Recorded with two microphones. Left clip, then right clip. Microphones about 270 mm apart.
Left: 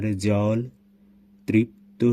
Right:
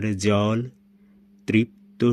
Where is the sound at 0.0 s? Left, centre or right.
Centre.